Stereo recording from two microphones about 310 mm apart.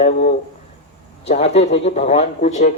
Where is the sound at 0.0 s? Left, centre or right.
Left.